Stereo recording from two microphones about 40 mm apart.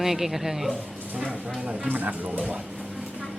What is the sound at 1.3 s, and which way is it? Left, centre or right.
Speech, right.